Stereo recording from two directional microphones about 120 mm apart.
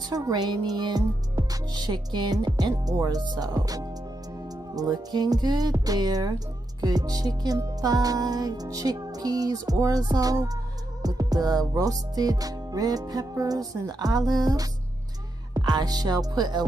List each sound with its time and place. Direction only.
0.1 s music: 35° right (ahead or behind)